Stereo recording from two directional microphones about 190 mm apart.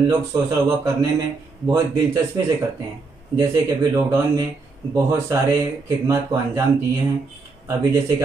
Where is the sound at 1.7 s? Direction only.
20° right (ahead or behind).